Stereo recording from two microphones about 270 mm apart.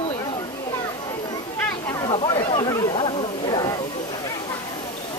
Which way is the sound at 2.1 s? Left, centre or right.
Centre.